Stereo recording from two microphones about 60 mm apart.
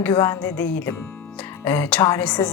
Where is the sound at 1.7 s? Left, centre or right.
Left.